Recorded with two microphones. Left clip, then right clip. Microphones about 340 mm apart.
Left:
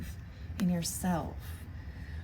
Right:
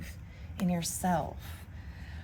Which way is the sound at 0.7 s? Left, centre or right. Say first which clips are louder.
Right 5 dB; centre.